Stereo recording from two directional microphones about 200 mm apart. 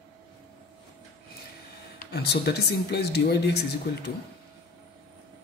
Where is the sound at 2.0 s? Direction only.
55° left (ahead or behind).